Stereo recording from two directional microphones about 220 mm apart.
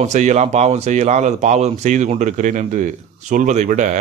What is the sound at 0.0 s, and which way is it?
A man's voice, 30° right (ahead or behind).